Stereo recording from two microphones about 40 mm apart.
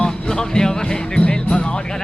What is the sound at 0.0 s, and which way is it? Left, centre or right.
Music, centre.